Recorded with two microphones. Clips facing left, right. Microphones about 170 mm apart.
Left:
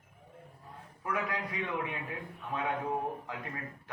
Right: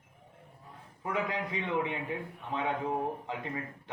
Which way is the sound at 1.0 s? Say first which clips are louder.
Right 2 dB; 25° right (ahead or behind).